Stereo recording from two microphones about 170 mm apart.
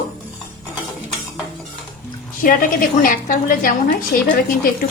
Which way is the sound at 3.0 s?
55° left (ahead or behind).